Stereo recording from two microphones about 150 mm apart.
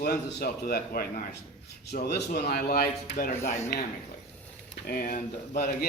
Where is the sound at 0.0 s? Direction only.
90° left; by 3.5 s 65° left (ahead or behind).